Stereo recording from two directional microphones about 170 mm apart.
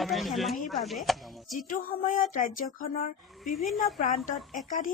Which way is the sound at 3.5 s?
55° left (ahead or behind).